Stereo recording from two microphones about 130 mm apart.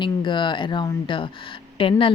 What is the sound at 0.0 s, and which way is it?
Speech, 40° left (ahead or behind).